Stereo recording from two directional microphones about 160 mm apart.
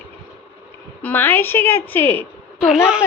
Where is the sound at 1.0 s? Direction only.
10° left (ahead or behind).